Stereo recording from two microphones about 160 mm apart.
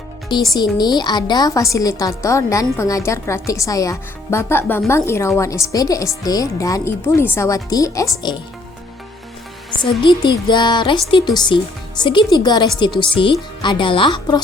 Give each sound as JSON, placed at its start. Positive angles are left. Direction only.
{"t": 0.5, "sound": "speech", "side_deg": 25}
{"t": 10.0, "sound": "speech", "side_deg": 30}